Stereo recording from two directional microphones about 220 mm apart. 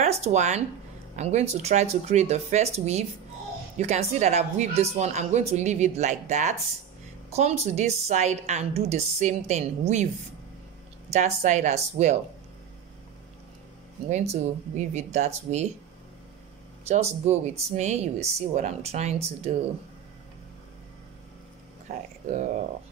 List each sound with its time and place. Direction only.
0.0 s a woman's voice: 30° right (ahead or behind)
11.1 s a woman's voice: 30° right (ahead or behind)
14.0 s a woman's voice: 30° right (ahead or behind)
16.8 s a woman's voice: 30° right (ahead or behind)